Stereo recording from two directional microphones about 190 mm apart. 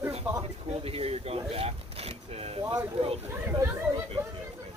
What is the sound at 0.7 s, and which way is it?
Speech, 30° right (ahead or behind).